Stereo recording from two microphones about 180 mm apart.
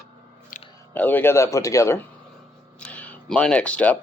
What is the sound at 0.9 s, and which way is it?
A man's voice, 10° left (ahead or behind).